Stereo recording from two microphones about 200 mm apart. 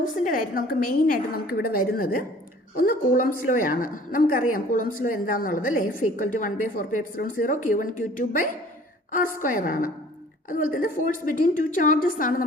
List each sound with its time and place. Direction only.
0.0 s a woman's voice: 45° left (ahead or behind)